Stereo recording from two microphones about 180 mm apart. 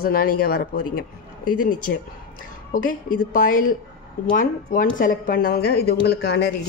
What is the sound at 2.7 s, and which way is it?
Speech, 50° left (ahead or behind).